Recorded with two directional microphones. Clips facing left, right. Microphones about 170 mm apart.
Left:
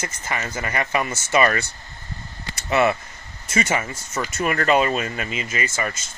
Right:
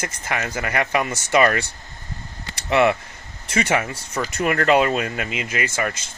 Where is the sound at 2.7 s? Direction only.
70° right (ahead or behind).